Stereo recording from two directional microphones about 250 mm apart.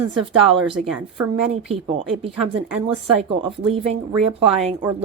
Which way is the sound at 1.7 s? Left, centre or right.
Right.